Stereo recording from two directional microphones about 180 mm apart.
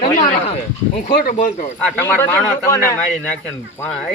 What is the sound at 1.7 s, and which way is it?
Speech, 10° left (ahead or behind).